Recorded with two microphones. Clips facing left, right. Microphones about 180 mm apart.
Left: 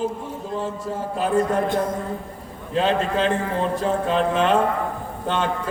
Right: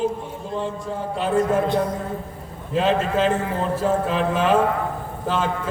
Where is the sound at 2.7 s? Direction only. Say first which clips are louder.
Right 1 dB; 5° right (ahead or behind).